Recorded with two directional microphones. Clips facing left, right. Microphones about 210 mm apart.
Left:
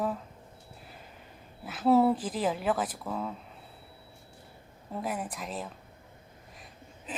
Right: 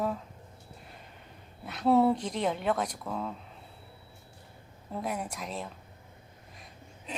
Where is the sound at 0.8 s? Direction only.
Centre (ahead or behind).